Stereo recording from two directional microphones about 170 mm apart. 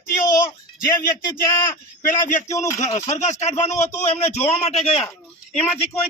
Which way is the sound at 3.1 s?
45° left (ahead or behind).